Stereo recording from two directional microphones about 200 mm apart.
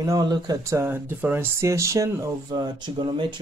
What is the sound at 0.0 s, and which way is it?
Speech, 20° right (ahead or behind).